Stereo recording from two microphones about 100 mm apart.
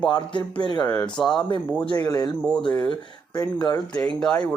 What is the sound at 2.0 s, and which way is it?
Speech, 40° left (ahead or behind).